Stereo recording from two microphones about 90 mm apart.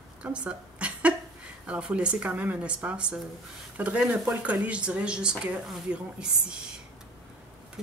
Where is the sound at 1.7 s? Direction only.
10° right (ahead or behind).